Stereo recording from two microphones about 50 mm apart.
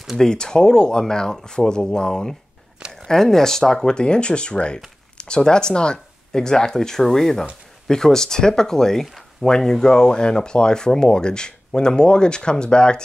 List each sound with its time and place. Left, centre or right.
0.2 s speech: centre